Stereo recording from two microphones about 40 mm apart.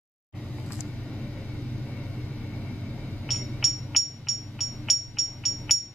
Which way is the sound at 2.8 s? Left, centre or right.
Left.